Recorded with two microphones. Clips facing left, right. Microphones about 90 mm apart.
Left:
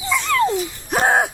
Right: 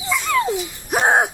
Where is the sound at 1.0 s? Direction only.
20° right (ahead or behind).